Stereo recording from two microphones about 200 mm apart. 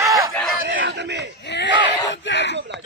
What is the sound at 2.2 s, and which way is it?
Speech, 60° left (ahead or behind).